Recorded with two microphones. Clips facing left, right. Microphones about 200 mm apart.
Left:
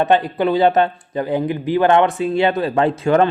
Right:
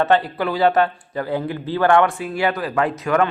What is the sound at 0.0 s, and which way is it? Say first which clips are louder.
Speech: left 2 dB; 20° left (ahead or behind).